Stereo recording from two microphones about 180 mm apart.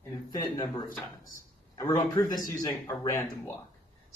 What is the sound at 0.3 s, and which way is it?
A man's voice, 20° left (ahead or behind).